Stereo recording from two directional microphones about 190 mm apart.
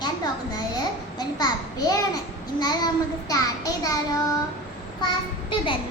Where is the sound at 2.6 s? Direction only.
20° left (ahead or behind).